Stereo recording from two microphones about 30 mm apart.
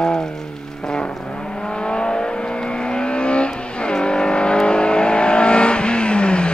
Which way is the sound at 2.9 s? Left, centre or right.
Left.